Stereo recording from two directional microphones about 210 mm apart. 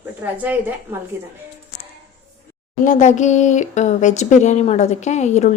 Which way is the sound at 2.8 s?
35° left (ahead or behind).